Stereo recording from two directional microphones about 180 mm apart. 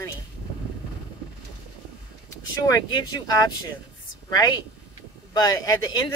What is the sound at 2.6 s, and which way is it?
A woman's voice, 20° left (ahead or behind).